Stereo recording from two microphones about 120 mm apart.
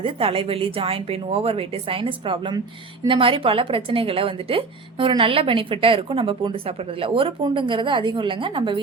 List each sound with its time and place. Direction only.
0.0 s a woman's voice: 50° right (ahead or behind)